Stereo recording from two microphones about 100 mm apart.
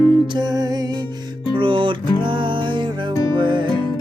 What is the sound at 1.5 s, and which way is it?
Music, 55° right (ahead or behind).